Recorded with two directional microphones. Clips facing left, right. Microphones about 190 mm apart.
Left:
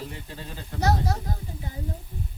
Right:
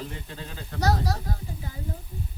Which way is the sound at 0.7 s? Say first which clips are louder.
Left 1 dB; 20° left (ahead or behind).